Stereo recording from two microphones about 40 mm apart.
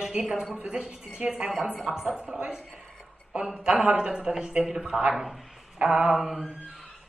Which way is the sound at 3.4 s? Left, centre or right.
Centre.